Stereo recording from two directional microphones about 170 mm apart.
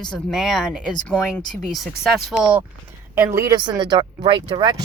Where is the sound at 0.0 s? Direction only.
5° left (ahead or behind); by 3.5 s 15° right (ahead or behind).